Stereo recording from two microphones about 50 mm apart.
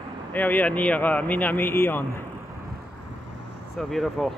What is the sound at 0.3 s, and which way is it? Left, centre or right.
Speech, left.